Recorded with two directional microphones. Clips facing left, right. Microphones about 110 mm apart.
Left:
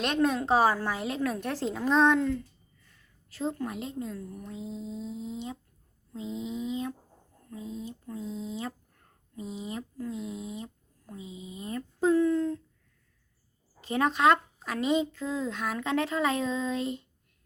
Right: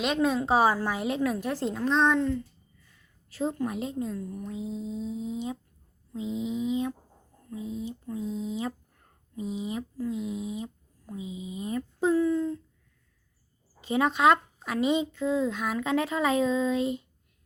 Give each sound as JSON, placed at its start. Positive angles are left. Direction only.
{"t": 0.0, "sound": "a woman's voice", "side_deg": 0}
{"t": 1.3, "sound": "a woman's voice", "side_deg": -5}
{"t": 3.6, "sound": "a woman's voice", "side_deg": -25}
{"t": 6.4, "sound": "speech", "side_deg": -15}
{"t": 7.7, "sound": "a sound", "side_deg": 30}
{"t": 8.0, "sound": "speech", "side_deg": -15}
{"t": 11.9, "sound": "speech", "side_deg": -5}
{"t": 13.8, "sound": "speech", "side_deg": -15}